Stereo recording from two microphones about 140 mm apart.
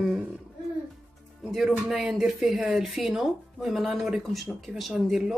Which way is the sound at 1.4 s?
Centre (ahead or behind).